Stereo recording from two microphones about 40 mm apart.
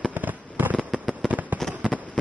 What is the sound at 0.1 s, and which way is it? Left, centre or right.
Fireworks, right.